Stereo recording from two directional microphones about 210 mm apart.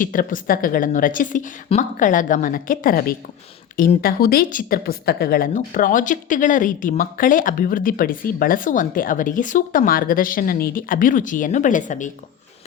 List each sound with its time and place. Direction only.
0.0 s a woman's voice: 40° left (ahead or behind)